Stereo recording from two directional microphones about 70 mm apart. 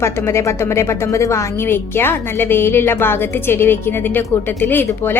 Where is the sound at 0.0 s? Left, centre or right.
Left.